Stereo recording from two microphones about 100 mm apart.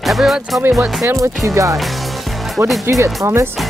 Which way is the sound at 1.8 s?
Centre (ahead or behind).